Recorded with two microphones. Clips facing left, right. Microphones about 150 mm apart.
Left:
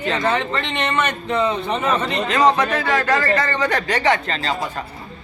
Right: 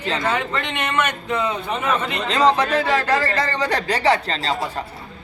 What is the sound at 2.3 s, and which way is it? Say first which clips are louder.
A man's voice: even; 30° right (ahead or behind).